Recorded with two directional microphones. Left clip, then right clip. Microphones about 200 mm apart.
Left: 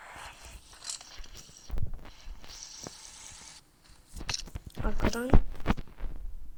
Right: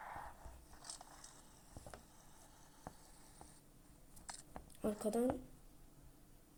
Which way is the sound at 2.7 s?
40° left (ahead or behind).